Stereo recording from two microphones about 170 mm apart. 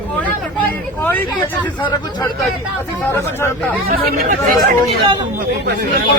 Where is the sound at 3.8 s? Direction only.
60° right (ahead or behind).